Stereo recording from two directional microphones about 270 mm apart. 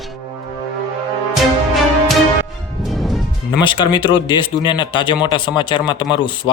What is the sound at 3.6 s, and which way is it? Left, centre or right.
Speech, centre.